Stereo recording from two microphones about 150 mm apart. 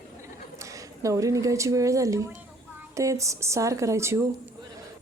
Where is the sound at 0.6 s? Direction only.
20° right (ahead or behind).